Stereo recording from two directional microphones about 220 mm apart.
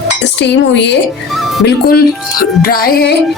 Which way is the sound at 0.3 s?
50° left (ahead or behind).